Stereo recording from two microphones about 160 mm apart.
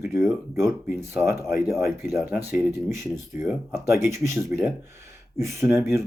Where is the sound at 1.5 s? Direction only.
Centre (ahead or behind).